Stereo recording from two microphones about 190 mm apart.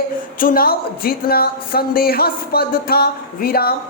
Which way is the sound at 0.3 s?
50° left (ahead or behind).